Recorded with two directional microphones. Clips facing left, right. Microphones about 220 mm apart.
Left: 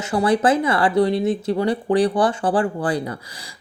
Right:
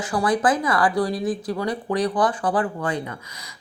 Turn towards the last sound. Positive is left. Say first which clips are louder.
# left 4 dB
turn(degrees=35)  # may be behind; listen again after turning